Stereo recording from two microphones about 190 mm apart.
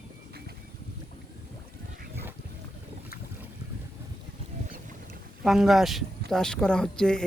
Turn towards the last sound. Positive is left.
turn(degrees=5)  # may be behind; listen again after turning